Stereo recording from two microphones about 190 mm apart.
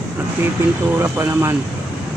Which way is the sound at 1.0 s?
10° right (ahead or behind).